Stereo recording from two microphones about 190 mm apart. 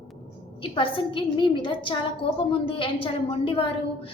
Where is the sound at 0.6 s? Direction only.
25° left (ahead or behind).